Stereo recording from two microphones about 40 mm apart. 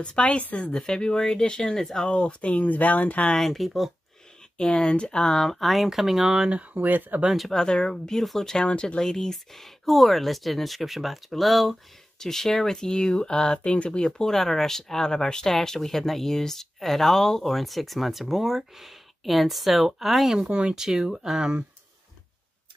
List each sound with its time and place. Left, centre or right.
0.0 s speech: left
0.4 s speech: left
0.7 s speech: centre
2.0 s speech: left
2.5 s speech: left
3.3 s speech: centre
4.6 s speech: centre
5.4 s speech: centre
6.7 s speech: right
7.5 s speech: centre
8.5 s speech: left; by 20.2 s centre
20.2 s speech: centre